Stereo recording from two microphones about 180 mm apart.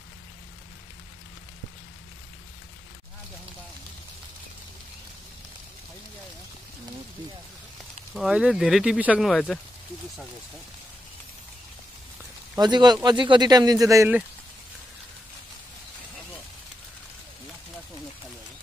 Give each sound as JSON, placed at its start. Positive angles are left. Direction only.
{"t": 8.1, "sound": "speech", "side_deg": -5}
{"t": 9.3, "sound": "speech", "side_deg": 5}
{"t": 12.5, "sound": "speech", "side_deg": -25}